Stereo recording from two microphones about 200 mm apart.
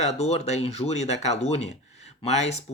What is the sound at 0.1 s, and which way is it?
Speech, 30° left (ahead or behind).